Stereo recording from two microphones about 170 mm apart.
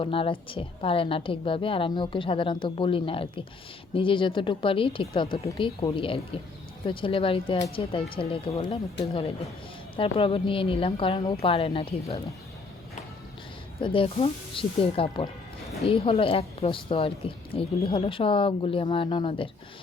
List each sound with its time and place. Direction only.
0.0 s a woman's voice: 30° left (ahead or behind)
13.8 s a woman's voice: 30° left (ahead or behind)